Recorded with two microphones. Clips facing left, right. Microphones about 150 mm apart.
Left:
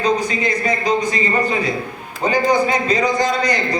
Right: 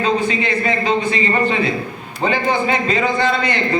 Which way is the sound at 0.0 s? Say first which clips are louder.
Even; 40° left (ahead or behind).